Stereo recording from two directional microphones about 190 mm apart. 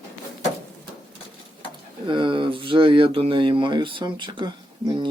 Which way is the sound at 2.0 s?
25° right (ahead or behind).